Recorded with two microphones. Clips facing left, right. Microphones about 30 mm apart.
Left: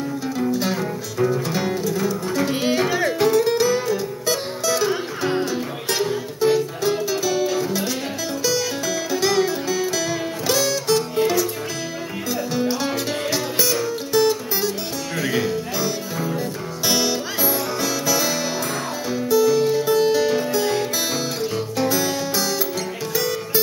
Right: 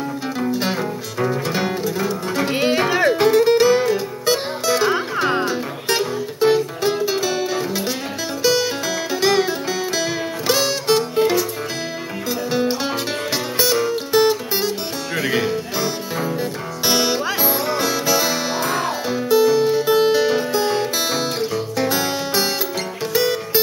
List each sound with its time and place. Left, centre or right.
0.5 s music: right
2.5 s music: right
3.1 s music: right
12.4 s music: right